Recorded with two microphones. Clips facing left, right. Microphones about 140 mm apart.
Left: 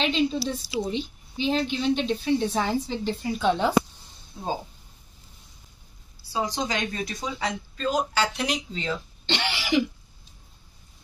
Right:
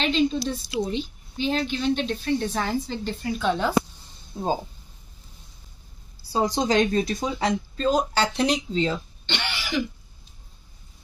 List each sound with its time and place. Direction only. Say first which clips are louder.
0.0 s a woman's voice: right 2 dB; 5° left (ahead or behind)
4.3 s speech: right 5 dB; 35° right (ahead or behind)
6.3 s speech: right 6 dB; 40° right (ahead or behind)
9.2 s speech: left 3 dB; 30° left (ahead or behind)